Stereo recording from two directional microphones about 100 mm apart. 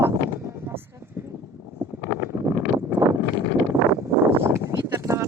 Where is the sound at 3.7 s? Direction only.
30° right (ahead or behind).